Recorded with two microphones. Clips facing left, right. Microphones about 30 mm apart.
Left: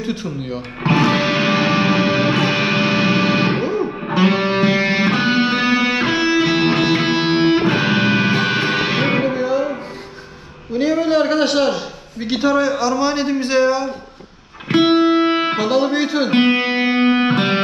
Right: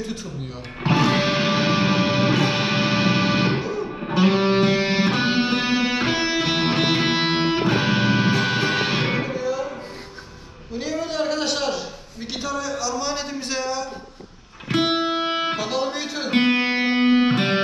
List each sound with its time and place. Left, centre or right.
0.0 s a man's voice: left
0.8 s music: centre
3.5 s music: left
4.1 s music: centre
7.4 s music: left
7.7 s music: centre
8.0 s music: left
9.0 s music: left
10.7 s a man's voice: left
13.1 s a man's voice: left
14.9 s music: centre
16.3 s music: left
16.6 s music: centre